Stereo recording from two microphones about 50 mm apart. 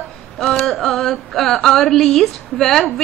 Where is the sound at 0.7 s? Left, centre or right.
Centre.